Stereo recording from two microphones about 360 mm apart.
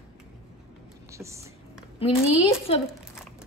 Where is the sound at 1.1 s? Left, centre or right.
Centre.